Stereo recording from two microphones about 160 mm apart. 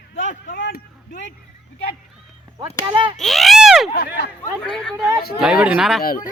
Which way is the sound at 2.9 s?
30° right (ahead or behind).